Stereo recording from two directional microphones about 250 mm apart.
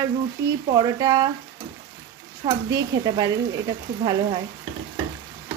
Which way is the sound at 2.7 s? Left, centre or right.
Centre.